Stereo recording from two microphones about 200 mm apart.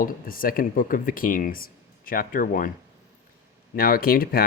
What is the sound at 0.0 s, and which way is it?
Speech, 45° left (ahead or behind).